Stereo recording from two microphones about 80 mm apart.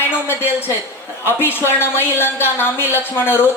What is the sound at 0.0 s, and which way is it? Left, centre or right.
A woman's voice, left.